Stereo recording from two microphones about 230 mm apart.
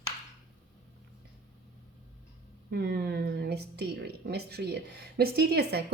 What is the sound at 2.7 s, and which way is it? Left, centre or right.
Speech, right.